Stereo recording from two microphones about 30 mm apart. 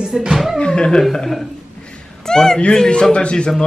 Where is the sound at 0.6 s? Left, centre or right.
Left.